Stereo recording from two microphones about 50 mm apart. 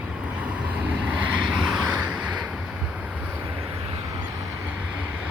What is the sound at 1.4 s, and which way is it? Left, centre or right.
Vehicle, centre.